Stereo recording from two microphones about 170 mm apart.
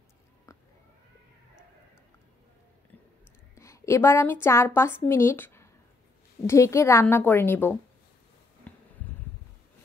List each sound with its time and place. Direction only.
0.5 s cat: 15° left (ahead or behind)
3.5 s a woman's voice: 15° left (ahead or behind)
8.7 s a sound: 10° left (ahead or behind)